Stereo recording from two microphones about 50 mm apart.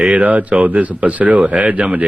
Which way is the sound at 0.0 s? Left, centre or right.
Right.